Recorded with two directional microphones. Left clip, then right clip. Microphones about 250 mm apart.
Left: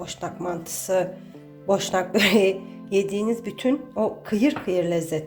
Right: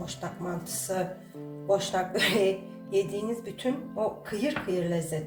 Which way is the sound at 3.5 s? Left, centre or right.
Left.